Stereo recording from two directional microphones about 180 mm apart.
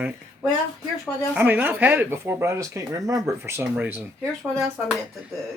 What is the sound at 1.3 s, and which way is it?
Speech, 10° right (ahead or behind).